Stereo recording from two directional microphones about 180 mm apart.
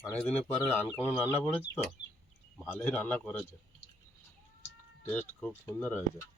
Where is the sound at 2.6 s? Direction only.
10° left (ahead or behind).